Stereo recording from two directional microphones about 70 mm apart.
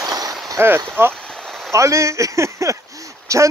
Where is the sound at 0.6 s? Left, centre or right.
Right.